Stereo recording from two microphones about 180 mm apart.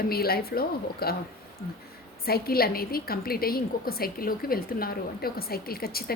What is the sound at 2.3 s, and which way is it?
A woman's voice, 60° left (ahead or behind).